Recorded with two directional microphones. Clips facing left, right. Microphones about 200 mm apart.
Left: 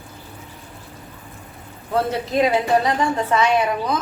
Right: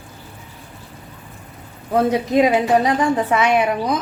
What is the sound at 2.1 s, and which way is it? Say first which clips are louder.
A woman's voice: right 3 dB; 15° right (ahead or behind).